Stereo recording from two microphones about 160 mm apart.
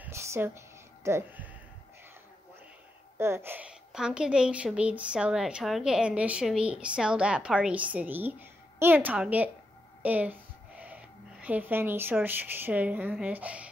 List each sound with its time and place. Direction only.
0.0 s music: 15° right (ahead or behind)
3.2 s a woman's voice: 15° right (ahead or behind)